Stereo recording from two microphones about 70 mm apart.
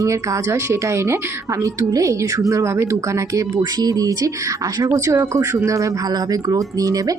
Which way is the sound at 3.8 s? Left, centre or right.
Right.